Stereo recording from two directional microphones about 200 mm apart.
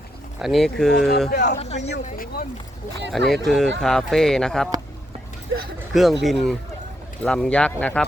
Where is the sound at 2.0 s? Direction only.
45° left (ahead or behind).